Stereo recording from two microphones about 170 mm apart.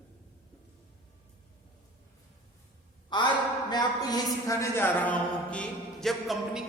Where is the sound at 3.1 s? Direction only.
25° left (ahead or behind).